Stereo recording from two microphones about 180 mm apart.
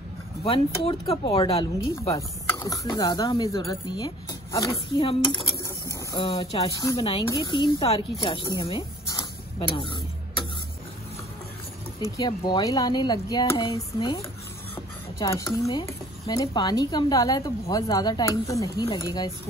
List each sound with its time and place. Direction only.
0.5 s speech: 30° left (ahead or behind)
12.2 s speech: 25° left (ahead or behind)